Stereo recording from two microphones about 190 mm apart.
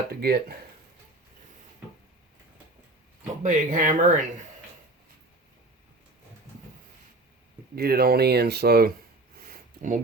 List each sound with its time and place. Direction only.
0.2 s speech: 55° right (ahead or behind)
3.4 s speech: 45° right (ahead or behind)
7.8 s speech: 55° right (ahead or behind)
9.5 s a sound: 40° right (ahead or behind)